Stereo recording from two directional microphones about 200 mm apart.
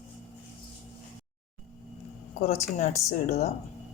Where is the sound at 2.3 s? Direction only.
35° left (ahead or behind).